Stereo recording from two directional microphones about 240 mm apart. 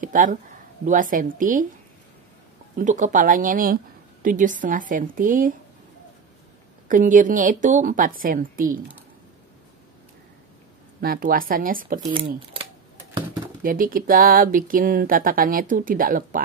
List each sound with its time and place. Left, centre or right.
0.0 s speech: right
2.8 s speech: right
6.9 s speech: right
11.0 s speech: right
13.6 s speech: right